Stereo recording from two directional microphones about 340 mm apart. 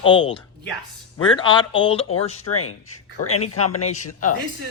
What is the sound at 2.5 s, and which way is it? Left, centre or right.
Speech, left.